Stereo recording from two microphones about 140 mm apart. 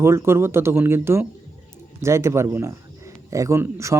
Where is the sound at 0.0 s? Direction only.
20° right (ahead or behind).